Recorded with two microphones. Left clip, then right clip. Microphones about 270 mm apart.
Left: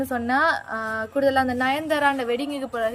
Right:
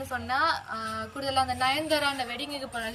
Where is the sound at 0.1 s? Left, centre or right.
Left.